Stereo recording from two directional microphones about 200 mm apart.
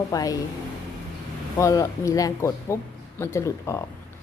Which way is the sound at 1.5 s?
15° left (ahead or behind).